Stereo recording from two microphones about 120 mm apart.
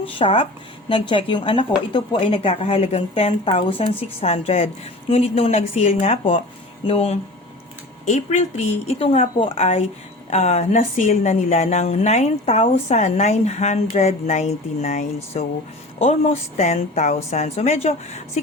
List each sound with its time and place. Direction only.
0.0 s a woman's voice: 50° left (ahead or behind)
8.0 s a woman's voice: 70° left (ahead or behind)